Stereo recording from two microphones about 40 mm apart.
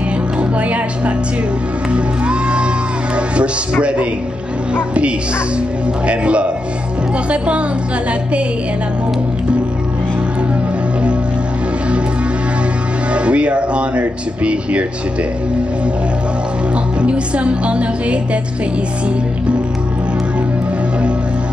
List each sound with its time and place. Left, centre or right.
0.4 s speech: right
1.9 s music: right
4.7 s a man's voice: right
13.1 s speech: right
17.0 s speech: right